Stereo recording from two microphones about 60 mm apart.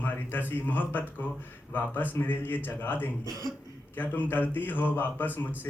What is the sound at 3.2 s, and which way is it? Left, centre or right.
Speech, right.